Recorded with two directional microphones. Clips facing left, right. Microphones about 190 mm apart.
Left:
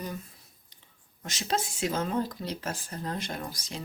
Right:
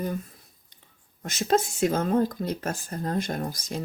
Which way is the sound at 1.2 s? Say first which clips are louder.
Right 7 dB; 50° right (ahead or behind).